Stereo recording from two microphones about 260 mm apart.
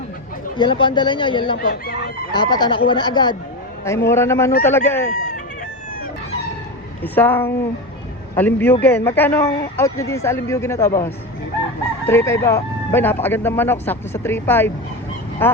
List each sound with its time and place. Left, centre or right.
0.5 s speech: centre
1.5 s speech: left
2.3 s speech: centre
7.0 s speech: centre
12.0 s speech: centre